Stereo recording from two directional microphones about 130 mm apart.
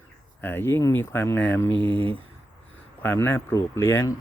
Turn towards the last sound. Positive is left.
turn(degrees=20)  # may be behind; listen again after turning